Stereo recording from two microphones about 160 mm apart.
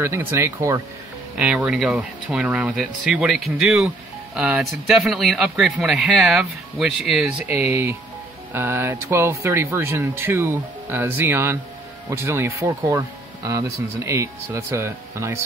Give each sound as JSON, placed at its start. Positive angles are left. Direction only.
{"t": 0.0, "sound": "speech", "side_deg": -15}
{"t": 1.3, "sound": "speech", "side_deg": -5}